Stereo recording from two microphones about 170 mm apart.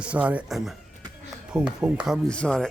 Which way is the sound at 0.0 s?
10° right (ahead or behind).